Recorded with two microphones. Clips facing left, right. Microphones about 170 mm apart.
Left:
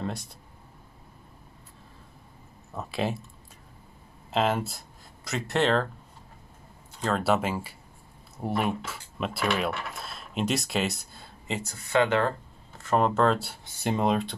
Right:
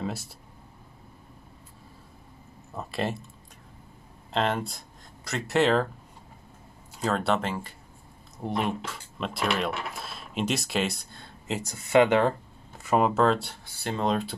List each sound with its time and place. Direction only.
0.0 s speech: 5° right (ahead or behind)
2.7 s speech: centre (ahead or behind)
4.3 s speech: 5° left (ahead or behind)
7.0 s speech: centre (ahead or behind)
11.6 s speech: 20° right (ahead or behind); by 13.6 s centre (ahead or behind)
13.7 s speech: 15° left (ahead or behind)